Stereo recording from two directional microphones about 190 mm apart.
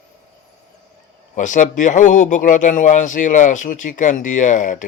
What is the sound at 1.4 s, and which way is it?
Speech, 40° left (ahead or behind).